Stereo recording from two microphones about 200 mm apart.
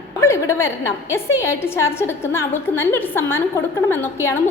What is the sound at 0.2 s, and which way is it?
A woman's voice, 15° left (ahead or behind).